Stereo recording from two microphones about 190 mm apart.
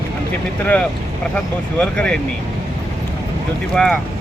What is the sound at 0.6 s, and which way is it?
Speech, 10° left (ahead or behind).